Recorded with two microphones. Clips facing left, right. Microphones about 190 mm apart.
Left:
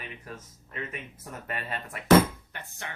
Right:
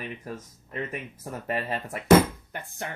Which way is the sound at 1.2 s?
35° right (ahead or behind).